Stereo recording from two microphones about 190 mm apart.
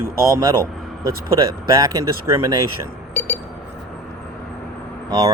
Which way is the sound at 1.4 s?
20° right (ahead or behind).